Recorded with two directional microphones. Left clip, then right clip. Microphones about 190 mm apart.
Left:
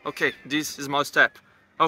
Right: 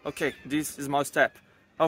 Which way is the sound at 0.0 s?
20° right (ahead or behind).